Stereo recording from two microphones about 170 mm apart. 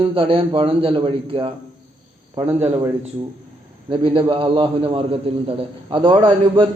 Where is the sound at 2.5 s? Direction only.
40° right (ahead or behind).